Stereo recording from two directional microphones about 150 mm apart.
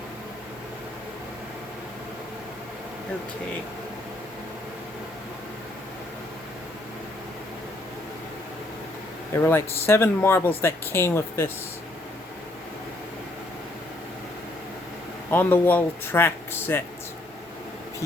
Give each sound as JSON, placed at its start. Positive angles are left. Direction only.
{"t": 9.3, "sound": "speech", "side_deg": 15}
{"t": 15.3, "sound": "speech", "side_deg": 15}